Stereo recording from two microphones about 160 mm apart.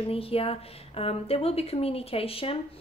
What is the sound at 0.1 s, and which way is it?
A woman's voice, 35° left (ahead or behind).